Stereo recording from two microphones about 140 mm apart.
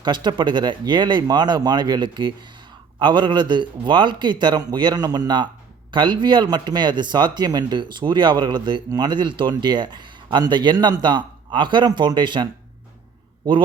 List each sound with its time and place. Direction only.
0.0 s speech: 35° right (ahead or behind)